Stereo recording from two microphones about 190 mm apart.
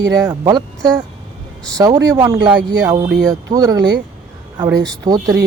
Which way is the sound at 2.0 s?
20° right (ahead or behind).